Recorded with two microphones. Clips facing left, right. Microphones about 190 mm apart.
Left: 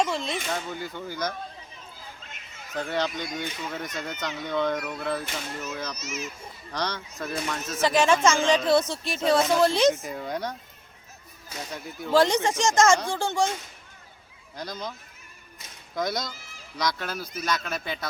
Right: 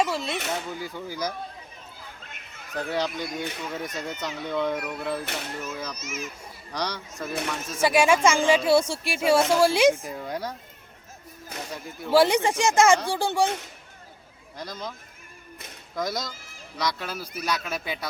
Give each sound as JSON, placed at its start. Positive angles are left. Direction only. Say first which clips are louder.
{"t": 0.0, "sound": "speech", "louder": "right 1 dB", "side_deg": -5}
{"t": 2.7, "sound": "speech", "louder": "even", "side_deg": -5}
{"t": 5.2, "sound": "speech", "louder": "right 1 dB", "side_deg": -65}
{"t": 5.7, "sound": "speech", "louder": "even", "side_deg": -5}
{"t": 6.0, "sound": "a child's voice", "louder": "even", "side_deg": -55}
{"t": 6.7, "sound": "speech", "louder": "even", "side_deg": -15}
{"t": 9.9, "sound": "speech", "louder": "even", "side_deg": 0}
{"t": 11.4, "sound": "speech", "louder": "even", "side_deg": -60}
{"t": 12.1, "sound": "speech", "louder": "right 2 dB", "side_deg": -15}
{"t": 14.5, "sound": "speech", "louder": "left 1 dB", "side_deg": 0}
{"t": 16.0, "sound": "speech", "louder": "left 1 dB", "side_deg": 0}